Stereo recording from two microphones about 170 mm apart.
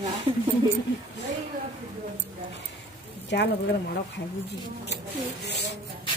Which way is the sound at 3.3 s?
85° left.